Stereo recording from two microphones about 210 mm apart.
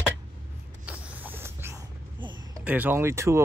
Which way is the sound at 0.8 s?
10° right (ahead or behind).